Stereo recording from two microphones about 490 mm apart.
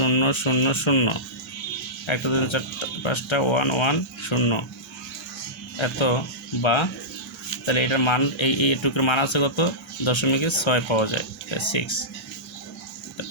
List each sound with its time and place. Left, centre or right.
0.0 s speech: left
5.7 s speech: left